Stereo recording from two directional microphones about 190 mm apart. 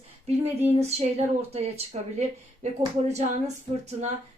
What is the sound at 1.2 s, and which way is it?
A woman's voice, 35° right (ahead or behind).